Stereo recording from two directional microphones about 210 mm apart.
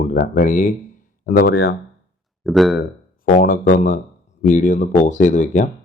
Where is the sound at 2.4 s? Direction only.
Centre (ahead or behind).